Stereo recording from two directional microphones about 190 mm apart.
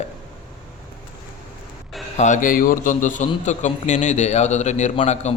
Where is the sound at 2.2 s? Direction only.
40° left (ahead or behind).